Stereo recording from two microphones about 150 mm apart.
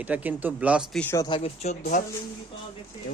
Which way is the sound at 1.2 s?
30° left (ahead or behind).